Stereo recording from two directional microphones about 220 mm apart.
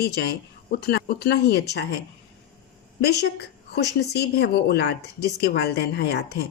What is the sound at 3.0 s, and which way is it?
A woman's voice, 50° left (ahead or behind).